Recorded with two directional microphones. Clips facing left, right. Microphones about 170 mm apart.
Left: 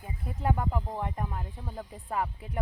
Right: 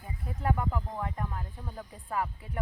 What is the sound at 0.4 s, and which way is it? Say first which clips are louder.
Speech: left 1 dB; 20° left (ahead or behind).